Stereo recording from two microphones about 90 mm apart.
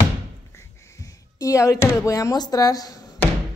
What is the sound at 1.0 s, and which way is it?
Speech, 40° left (ahead or behind).